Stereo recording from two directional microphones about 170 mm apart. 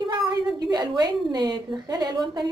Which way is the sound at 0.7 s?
25° right (ahead or behind).